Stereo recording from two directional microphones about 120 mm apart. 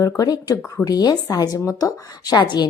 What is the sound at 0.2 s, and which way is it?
Speech, 30° left (ahead or behind).